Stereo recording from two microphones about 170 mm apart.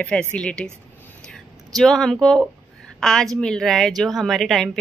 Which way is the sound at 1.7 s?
Centre (ahead or behind).